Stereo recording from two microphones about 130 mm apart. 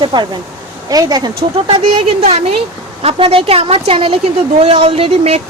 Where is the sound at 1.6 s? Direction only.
45° right (ahead or behind).